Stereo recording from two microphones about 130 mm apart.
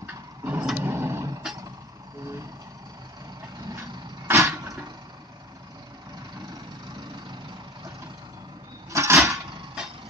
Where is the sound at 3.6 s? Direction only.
25° right (ahead or behind).